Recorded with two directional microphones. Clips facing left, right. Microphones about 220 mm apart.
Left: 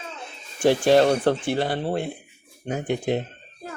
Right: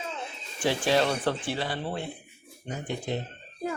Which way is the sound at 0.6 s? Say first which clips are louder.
Left 8 dB; 45° left (ahead or behind).